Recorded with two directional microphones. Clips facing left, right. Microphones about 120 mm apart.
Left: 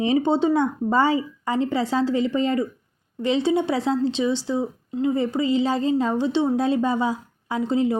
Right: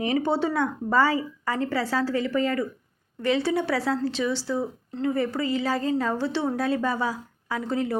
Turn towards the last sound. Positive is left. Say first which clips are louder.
# left 5 dB
turn(degrees=20)  # may be behind; listen again after turning